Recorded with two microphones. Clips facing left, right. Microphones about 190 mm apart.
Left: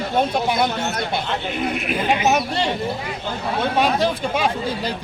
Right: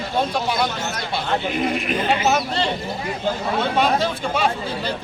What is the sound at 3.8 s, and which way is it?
Speech, 10° left (ahead or behind).